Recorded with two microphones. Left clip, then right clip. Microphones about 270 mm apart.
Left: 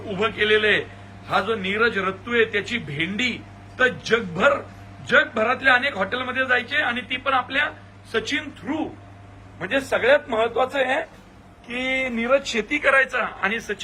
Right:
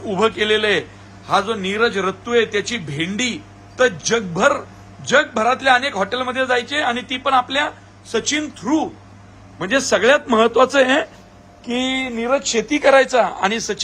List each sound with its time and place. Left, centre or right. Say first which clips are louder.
0.1 s a man's voice: right 3 dB; centre
9.6 s a man's voice: right 6 dB; right
11.8 s a man's voice: right 1 dB; centre